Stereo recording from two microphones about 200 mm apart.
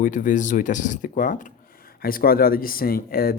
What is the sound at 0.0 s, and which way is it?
Speech, 40° left (ahead or behind).